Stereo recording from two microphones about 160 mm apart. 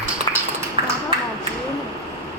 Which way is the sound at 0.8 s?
35° right (ahead or behind).